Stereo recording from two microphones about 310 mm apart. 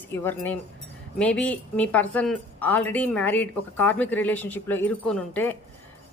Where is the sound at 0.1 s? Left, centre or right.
Centre.